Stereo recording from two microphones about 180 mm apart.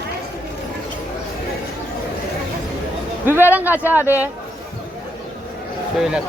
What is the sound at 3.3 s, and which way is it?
Speech, 10° right (ahead or behind).